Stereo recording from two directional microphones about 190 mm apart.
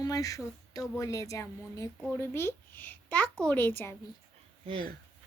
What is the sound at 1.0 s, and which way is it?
A woman's voice, 15° left (ahead or behind).